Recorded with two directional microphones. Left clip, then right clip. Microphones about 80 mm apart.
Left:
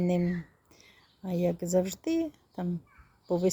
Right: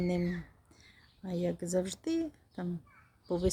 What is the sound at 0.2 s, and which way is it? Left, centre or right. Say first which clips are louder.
Speech: left 4 dB; centre.